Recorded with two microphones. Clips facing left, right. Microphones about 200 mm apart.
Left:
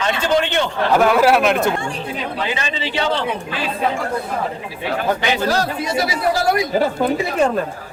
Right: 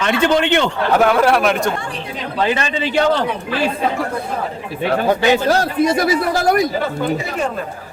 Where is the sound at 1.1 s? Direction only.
5° left (ahead or behind).